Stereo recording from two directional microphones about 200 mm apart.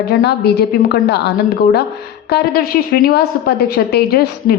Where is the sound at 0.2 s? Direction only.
55° left (ahead or behind).